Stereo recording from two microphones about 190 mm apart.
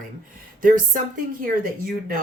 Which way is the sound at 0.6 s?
45° right (ahead or behind).